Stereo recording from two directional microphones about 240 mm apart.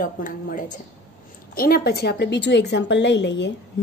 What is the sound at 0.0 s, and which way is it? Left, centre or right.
A woman's voice, left.